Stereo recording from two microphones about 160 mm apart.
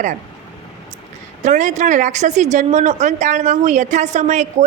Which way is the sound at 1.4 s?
50° right (ahead or behind).